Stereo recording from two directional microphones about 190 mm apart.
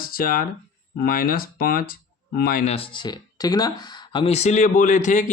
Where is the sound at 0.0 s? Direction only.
50° left (ahead or behind).